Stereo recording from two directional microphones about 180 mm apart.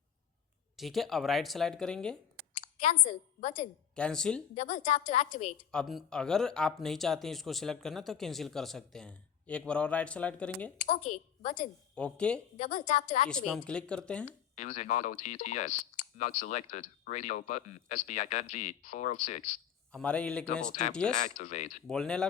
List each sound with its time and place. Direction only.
0.8 s speech: centre (ahead or behind)
2.6 s a woman's voice: 40° left (ahead or behind)
3.9 s speech: 5° left (ahead or behind)
4.5 s speech: 40° left (ahead or behind)
5.7 s speech: centre (ahead or behind)
10.8 s a woman's voice: 45° left (ahead or behind)
11.9 s speech: 5° left (ahead or behind)
12.7 s speech: 45° left (ahead or behind)
13.2 s speech: 5° left (ahead or behind)
14.5 s speech: 40° left (ahead or behind)
19.9 s speech: 5° left (ahead or behind)
21.3 s speech: 40° left (ahead or behind)
21.8 s speech: 5° left (ahead or behind)